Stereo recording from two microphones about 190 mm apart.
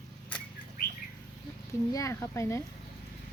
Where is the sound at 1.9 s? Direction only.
15° left (ahead or behind).